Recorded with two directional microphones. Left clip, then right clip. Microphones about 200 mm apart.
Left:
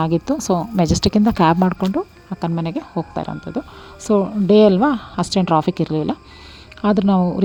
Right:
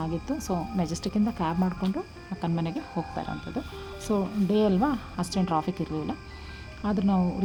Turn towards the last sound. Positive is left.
turn(degrees=35)  # may be behind; listen again after turning